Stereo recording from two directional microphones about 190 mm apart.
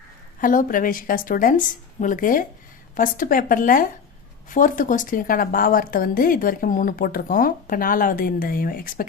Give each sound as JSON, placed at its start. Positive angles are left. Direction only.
{"t": 0.4, "sound": "a woman's voice", "side_deg": 45}